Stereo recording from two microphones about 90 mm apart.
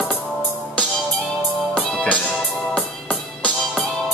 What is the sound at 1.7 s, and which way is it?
Music, 10° left (ahead or behind).